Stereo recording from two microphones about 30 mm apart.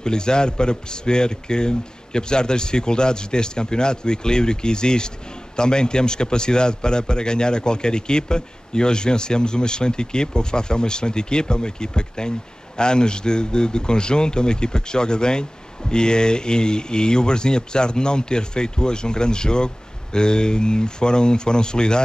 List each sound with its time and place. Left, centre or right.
0.0 s a man's voice: left